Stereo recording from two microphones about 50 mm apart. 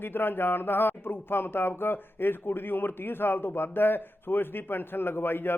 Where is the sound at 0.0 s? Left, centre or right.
Left.